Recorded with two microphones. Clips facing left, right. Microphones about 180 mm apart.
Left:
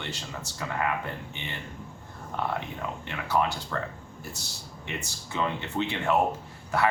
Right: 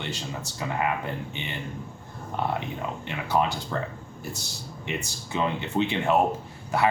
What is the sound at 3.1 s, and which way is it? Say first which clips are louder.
Speech: right 2 dB; 15° right (ahead or behind).